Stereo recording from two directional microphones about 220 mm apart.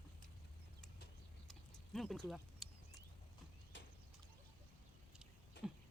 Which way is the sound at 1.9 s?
Centre (ahead or behind).